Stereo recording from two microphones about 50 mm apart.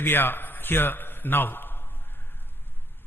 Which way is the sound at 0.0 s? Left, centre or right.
Left.